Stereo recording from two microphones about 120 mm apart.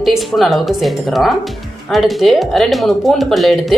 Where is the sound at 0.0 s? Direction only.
Centre (ahead or behind).